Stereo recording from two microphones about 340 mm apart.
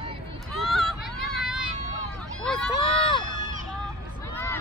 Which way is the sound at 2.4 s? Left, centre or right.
Centre.